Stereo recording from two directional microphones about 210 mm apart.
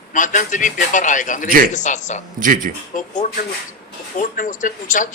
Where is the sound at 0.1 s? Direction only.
35° left (ahead or behind).